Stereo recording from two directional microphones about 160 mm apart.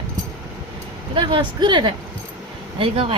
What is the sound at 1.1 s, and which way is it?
Speech, 30° right (ahead or behind).